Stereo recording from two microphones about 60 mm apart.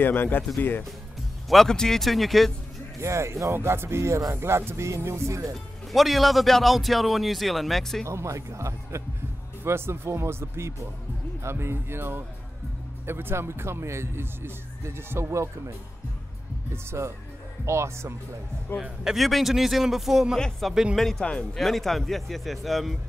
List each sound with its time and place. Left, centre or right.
0.0 s speech: left
1.5 s a man's voice: centre
3.0 s speech: right
3.5 s speech: right
5.9 s a man's voice: centre
8.1 s speech: right
16.7 s speech: right
18.7 s speech: left
19.0 s a man's voice: centre
21.0 s a man's voice: centre